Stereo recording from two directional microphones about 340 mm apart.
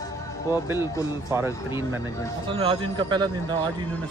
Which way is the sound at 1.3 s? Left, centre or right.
Centre.